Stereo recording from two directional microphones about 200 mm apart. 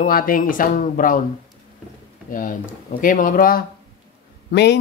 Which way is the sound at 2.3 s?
40° left (ahead or behind).